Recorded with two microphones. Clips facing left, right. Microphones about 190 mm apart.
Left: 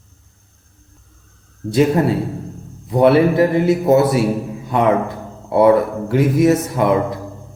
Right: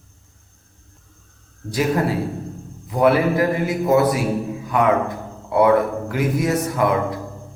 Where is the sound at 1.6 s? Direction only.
25° left (ahead or behind).